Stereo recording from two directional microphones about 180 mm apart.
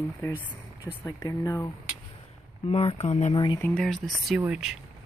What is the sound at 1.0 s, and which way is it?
Speech, 20° left (ahead or behind).